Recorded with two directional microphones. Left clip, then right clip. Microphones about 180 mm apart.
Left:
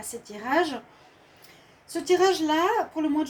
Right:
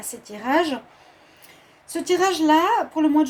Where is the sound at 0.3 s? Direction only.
50° right (ahead or behind).